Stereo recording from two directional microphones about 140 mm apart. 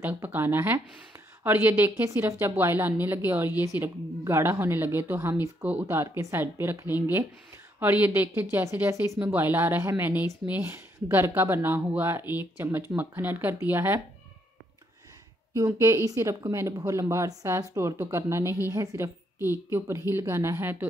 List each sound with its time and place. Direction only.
0.0 s speech: 15° right (ahead or behind)
15.5 s speech: 20° right (ahead or behind)